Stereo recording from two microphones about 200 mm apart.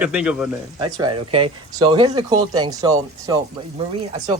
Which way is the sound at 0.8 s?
25° right (ahead or behind).